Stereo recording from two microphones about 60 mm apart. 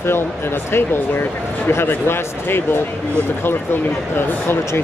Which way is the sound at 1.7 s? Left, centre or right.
Left.